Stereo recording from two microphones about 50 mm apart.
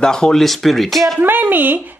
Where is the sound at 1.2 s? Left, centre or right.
Right.